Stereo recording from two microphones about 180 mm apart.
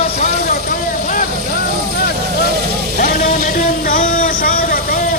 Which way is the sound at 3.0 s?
45° left (ahead or behind).